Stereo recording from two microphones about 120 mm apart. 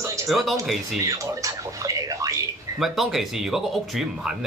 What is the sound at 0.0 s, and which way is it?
Music, 25° right (ahead or behind).